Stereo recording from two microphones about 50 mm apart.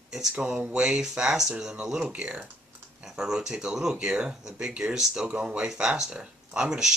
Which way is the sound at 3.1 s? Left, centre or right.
Centre.